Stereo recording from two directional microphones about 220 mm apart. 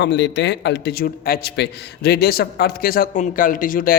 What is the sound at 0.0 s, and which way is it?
A man's voice, 50° left (ahead or behind).